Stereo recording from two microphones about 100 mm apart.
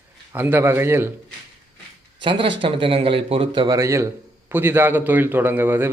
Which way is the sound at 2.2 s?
55° right (ahead or behind).